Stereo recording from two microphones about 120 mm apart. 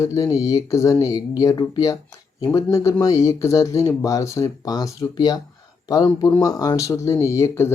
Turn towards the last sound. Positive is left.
turn(degrees=20)  # may be behind; listen again after turning